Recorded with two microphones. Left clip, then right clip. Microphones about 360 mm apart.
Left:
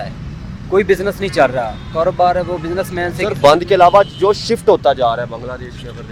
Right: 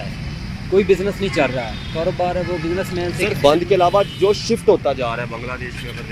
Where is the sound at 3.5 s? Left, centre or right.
Left.